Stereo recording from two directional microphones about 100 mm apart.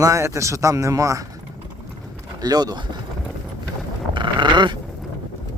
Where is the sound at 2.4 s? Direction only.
40° right (ahead or behind).